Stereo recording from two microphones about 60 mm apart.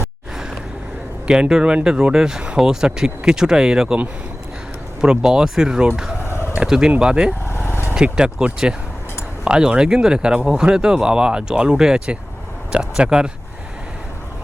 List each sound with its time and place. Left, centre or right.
1.3 s speech: centre
4.9 s speech: centre
6.2 s fowl: left
6.6 s speech: centre
7.4 s vehicle: left
7.9 s speech: centre